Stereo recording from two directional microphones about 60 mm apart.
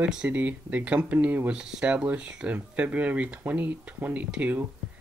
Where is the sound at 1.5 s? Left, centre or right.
Centre.